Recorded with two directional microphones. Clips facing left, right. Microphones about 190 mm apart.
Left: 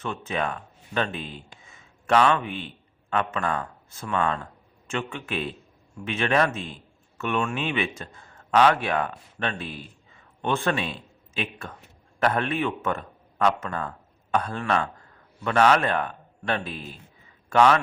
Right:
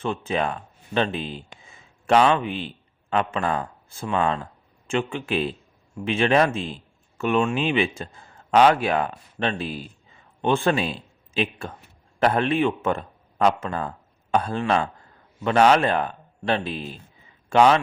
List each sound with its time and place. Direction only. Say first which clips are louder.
0.0 s a man's voice: right 4 dB; 30° right (ahead or behind)